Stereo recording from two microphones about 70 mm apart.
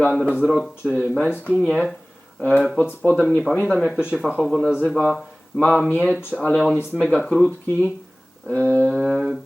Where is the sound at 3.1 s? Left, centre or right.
Left.